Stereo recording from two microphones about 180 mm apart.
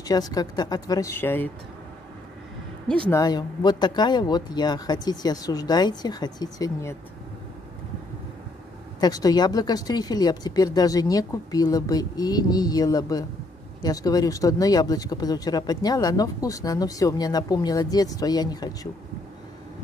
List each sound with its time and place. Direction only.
0.3 s speech: 20° left (ahead or behind)
3.1 s speech: 20° left (ahead or behind)
9.0 s speech: 20° left (ahead or behind)